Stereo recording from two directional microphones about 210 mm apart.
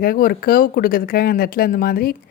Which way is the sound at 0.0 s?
45° left (ahead or behind).